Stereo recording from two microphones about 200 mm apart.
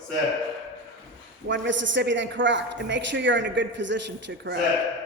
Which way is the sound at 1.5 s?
65° right (ahead or behind).